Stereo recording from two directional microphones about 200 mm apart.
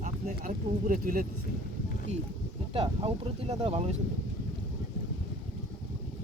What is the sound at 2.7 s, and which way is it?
Speech, 30° right (ahead or behind).